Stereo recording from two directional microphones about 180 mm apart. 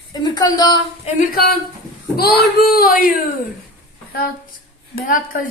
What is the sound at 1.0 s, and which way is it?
Speech, 50° left (ahead or behind).